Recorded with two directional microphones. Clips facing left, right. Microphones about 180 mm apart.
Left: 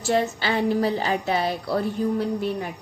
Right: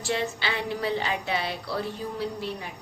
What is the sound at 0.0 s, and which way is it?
A woman's voice, 45° left (ahead or behind).